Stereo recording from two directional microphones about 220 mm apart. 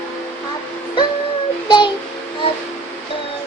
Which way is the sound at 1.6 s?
20° left (ahead or behind).